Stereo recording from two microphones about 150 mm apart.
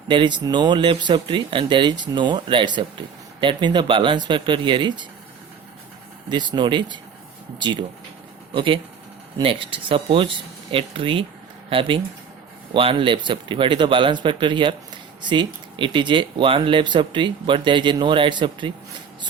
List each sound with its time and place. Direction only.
0.1 s speech: 30° right (ahead or behind)
6.2 s speech: 30° right (ahead or behind)